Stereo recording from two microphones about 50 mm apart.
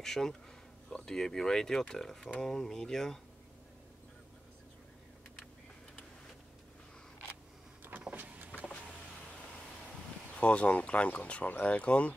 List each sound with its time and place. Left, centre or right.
0.0 s speech: centre
8.1 s vehicle: right
10.3 s speech: left